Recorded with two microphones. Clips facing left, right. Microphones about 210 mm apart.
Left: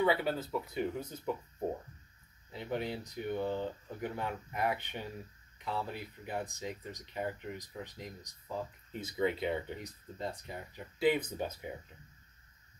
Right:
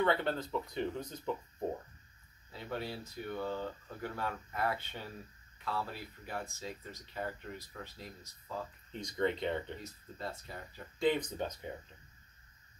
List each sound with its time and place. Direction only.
0.0 s speech: 5° left (ahead or behind)
2.5 s speech: 20° left (ahead or behind)
11.0 s speech: 5° left (ahead or behind)